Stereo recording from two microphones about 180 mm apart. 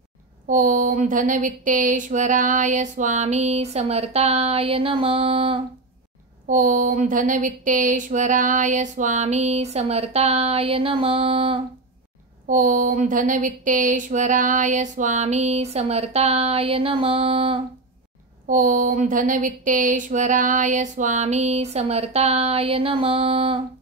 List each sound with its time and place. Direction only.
0.5 s speech: 45° right (ahead or behind); by 5.6 s 30° right (ahead or behind)
6.4 s speech: 50° right (ahead or behind); by 11.6 s 30° right (ahead or behind)
12.4 s speech: 45° right (ahead or behind); by 17.6 s 30° right (ahead or behind)
18.5 s speech: 50° right (ahead or behind); by 23.6 s 30° right (ahead or behind)